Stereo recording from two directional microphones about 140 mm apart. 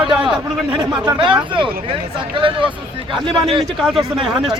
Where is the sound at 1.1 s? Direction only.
35° right (ahead or behind).